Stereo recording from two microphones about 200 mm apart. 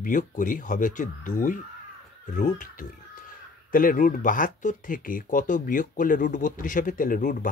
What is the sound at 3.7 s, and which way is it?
Speech, 40° left (ahead or behind).